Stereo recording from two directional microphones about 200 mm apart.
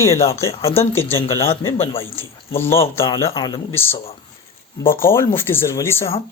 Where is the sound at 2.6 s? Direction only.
10° left (ahead or behind).